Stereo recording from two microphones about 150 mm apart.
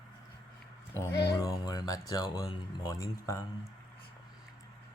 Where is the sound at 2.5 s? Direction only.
25° left (ahead or behind).